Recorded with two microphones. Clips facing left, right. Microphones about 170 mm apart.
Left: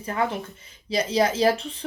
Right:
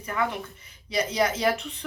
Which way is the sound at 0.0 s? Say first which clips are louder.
Left 2 dB; 30° left (ahead or behind).